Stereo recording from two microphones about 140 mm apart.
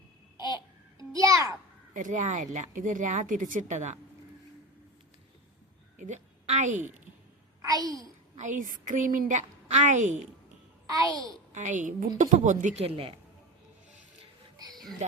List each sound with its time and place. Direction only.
0.9 s a sound: 25° right (ahead or behind)
1.9 s a woman's voice: 65° right (ahead or behind)
6.0 s a woman's voice: 60° right (ahead or behind)
7.6 s a child's voice: 25° right (ahead or behind)
8.4 s a woman's voice: 65° right (ahead or behind)
11.5 s a woman's voice: 65° right (ahead or behind); by 13.1 s 45° right (ahead or behind)
14.7 s a sound: centre (ahead or behind)